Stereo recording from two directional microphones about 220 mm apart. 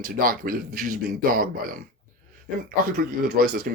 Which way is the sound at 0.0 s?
40° right (ahead or behind).